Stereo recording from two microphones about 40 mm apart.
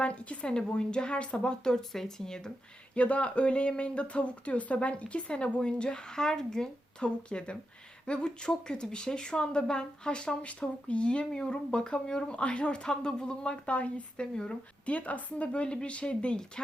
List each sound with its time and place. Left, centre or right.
0.0 s a woman's voice: left
1.4 s speech: centre
2.9 s speech: left; by 6.7 s centre
7.0 s speech: left